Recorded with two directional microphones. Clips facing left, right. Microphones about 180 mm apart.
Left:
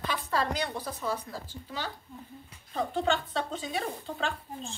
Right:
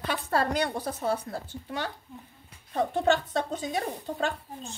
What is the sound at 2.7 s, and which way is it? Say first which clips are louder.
A woman's voice: right 4 dB; 50° right (ahead or behind).